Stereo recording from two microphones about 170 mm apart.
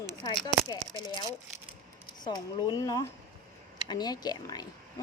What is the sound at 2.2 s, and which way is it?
Speech, 25° left (ahead or behind).